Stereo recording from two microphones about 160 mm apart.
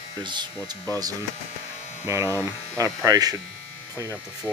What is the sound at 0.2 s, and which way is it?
Speech, 30° right (ahead or behind).